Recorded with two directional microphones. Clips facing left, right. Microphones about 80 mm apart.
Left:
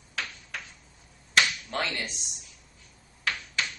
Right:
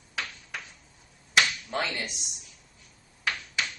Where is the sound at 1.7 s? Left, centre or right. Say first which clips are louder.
Right 2 dB; centre.